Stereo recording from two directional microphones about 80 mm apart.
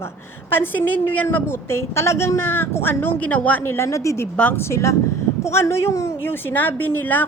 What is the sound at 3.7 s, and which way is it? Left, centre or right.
A woman's voice, left.